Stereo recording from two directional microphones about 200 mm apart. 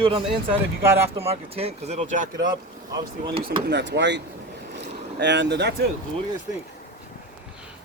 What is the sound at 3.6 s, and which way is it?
Speech, 60° right (ahead or behind).